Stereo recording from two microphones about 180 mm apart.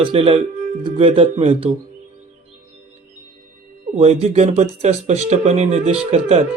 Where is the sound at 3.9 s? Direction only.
35° right (ahead or behind).